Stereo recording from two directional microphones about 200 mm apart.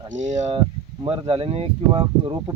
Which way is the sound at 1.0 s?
25° right (ahead or behind).